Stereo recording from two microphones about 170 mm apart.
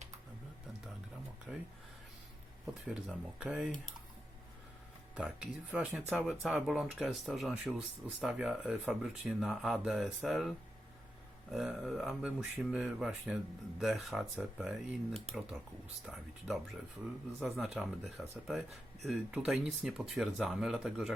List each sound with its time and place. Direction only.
1.5 s speech: 5° right (ahead or behind)
2.8 s speech: 5° right (ahead or behind)
5.1 s speech: 5° right (ahead or behind)
11.5 s speech: centre (ahead or behind)
17.8 s speech: centre (ahead or behind)